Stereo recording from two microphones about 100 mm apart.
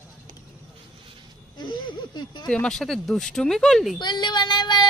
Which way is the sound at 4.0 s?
50° left (ahead or behind).